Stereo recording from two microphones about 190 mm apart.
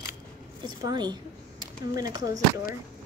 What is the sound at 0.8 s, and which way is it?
A woman's voice, 20° right (ahead or behind).